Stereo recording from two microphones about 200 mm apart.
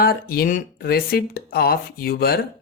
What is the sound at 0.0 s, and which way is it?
Speech, 50° left (ahead or behind).